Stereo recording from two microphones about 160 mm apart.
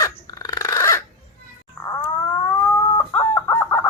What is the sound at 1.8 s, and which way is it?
Dog, 20° left (ahead or behind).